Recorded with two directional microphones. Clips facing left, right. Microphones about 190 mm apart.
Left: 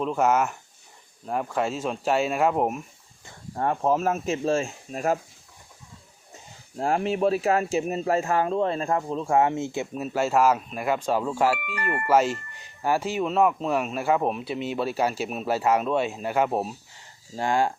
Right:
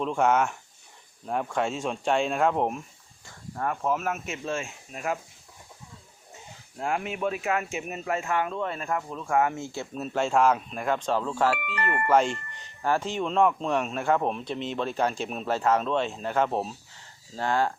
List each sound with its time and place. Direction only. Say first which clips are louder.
0.0 s speech: left 1 dB; 5° left (ahead or behind)
3.2 s speech: left 4 dB; 30° left (ahead or behind)
6.7 s speech: left 6 dB; 35° left (ahead or behind); by 17.7 s 15° left (ahead or behind)